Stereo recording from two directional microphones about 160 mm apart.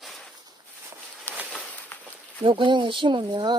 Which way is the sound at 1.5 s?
5° left (ahead or behind).